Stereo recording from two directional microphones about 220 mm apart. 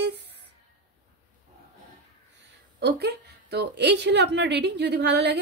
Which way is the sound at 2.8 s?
50° right (ahead or behind).